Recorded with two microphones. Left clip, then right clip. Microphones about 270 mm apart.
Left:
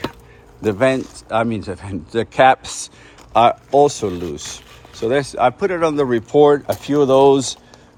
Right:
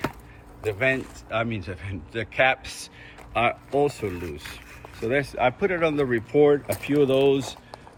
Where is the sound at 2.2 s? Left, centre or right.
Left.